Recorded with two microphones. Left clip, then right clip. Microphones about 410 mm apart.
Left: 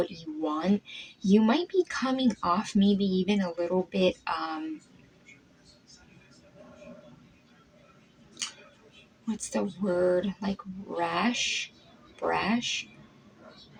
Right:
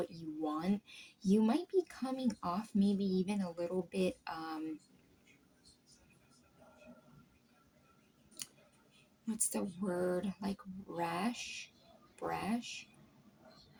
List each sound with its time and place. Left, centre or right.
0.4 s speech: right
9.2 s speech: right